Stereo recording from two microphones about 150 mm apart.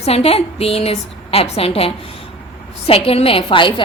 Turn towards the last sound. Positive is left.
turn(degrees=35)  # may be behind; listen again after turning